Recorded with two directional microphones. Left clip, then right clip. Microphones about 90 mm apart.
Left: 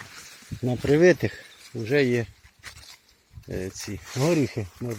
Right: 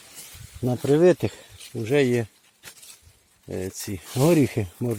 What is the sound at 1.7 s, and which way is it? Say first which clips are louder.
Speech: right 1 dB; 10° right (ahead or behind).